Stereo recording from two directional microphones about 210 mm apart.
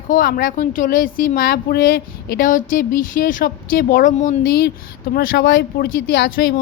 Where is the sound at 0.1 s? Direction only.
45° left (ahead or behind).